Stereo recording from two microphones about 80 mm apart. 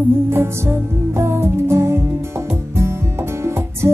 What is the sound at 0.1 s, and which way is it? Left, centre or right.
Music, right.